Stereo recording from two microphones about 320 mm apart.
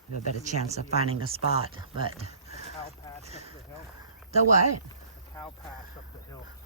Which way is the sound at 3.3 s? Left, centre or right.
Centre.